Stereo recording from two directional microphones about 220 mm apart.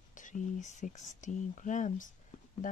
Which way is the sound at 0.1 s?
35° left (ahead or behind).